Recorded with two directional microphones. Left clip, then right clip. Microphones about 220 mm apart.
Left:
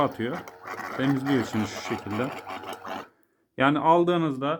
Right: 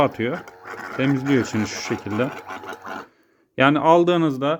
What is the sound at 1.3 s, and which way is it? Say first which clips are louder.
Speech: right 5 dB; 20° right (ahead or behind).